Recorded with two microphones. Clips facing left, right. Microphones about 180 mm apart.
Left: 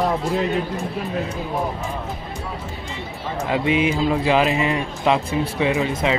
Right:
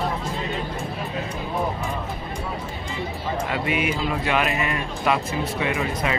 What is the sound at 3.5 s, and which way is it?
Speech, 25° left (ahead or behind).